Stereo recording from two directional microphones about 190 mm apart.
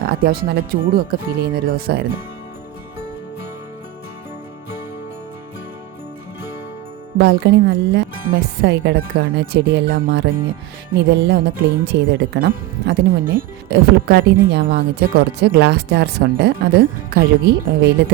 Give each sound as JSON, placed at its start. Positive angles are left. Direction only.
{"t": 0.0, "sound": "speech", "side_deg": -55}
{"t": 7.2, "sound": "speech", "side_deg": -65}